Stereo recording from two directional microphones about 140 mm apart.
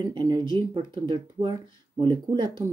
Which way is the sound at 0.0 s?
30° right (ahead or behind).